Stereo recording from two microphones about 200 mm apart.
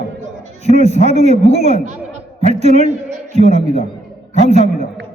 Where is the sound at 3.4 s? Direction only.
30° left (ahead or behind).